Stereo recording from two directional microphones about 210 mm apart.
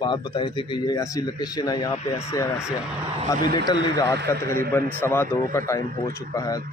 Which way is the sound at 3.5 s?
20° left (ahead or behind).